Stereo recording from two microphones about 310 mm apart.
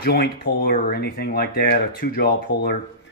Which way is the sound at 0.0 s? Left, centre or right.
Left.